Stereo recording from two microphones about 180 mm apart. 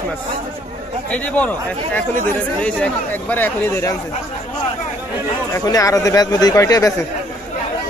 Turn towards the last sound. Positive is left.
turn(degrees=20)  # may be behind; listen again after turning